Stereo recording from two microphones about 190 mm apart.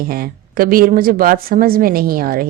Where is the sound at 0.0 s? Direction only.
50° right (ahead or behind).